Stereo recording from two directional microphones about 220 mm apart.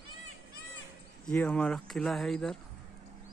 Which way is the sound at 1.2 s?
5° left (ahead or behind).